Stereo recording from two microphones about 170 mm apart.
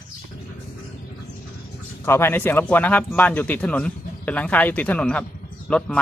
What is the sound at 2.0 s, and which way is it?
Speech, 15° left (ahead or behind).